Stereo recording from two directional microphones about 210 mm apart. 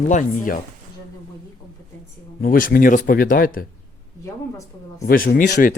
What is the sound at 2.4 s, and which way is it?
Speech, 45° left (ahead or behind).